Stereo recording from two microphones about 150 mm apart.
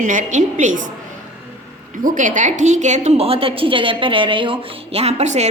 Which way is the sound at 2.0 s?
60° right (ahead or behind).